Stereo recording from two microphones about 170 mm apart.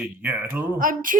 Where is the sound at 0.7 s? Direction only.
55° right (ahead or behind).